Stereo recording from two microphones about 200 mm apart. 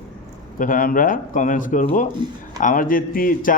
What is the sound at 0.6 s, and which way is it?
A man's voice, 45° left (ahead or behind).